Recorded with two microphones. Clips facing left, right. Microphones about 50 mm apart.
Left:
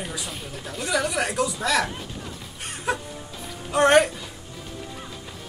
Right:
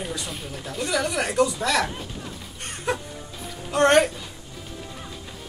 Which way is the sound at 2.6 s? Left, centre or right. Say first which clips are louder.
Even; centre.